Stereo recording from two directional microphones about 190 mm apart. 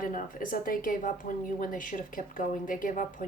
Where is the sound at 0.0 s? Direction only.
45° left (ahead or behind).